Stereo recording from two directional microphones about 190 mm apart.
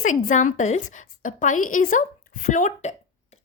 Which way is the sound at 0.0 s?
40° left (ahead or behind).